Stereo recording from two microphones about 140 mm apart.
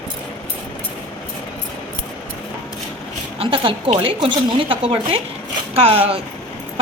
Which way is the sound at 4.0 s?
35° right (ahead or behind).